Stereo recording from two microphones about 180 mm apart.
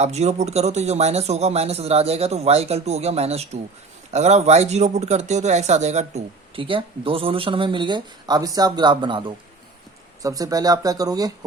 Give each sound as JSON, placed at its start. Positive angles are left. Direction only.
{"t": 0.0, "sound": "a man's voice", "side_deg": -35}